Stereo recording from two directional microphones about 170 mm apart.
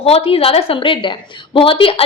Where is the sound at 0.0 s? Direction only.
35° left (ahead or behind).